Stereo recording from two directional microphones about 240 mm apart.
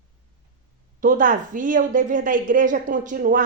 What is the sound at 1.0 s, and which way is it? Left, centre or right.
A woman's voice, right.